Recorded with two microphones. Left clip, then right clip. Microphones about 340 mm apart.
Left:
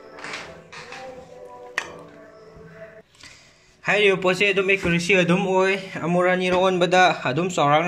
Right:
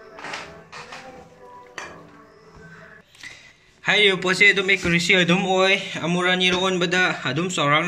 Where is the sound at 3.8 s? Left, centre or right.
Centre.